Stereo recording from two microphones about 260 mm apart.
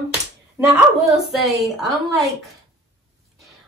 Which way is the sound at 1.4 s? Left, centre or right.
Centre.